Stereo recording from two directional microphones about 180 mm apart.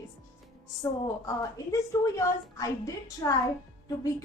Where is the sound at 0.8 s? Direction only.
20° left (ahead or behind).